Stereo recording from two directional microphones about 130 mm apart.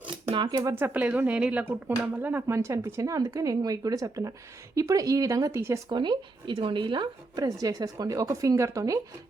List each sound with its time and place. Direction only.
0.3 s speech: 40° right (ahead or behind)
0.5 s speech: 25° right (ahead or behind)
0.9 s a woman's voice: 10° right (ahead or behind)
5.9 s speech: 35° right (ahead or behind)